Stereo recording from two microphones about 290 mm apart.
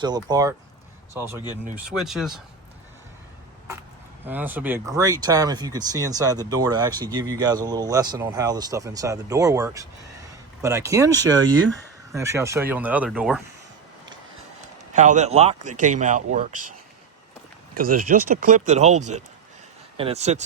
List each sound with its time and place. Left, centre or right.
0.0 s speech: centre
4.3 s speech: centre
14.9 s speech: right
18.3 s speech: right